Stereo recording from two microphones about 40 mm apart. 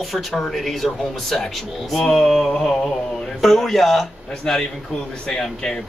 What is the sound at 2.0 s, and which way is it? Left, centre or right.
Speech, centre.